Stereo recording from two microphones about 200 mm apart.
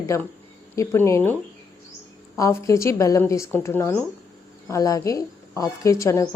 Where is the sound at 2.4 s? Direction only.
15° left (ahead or behind).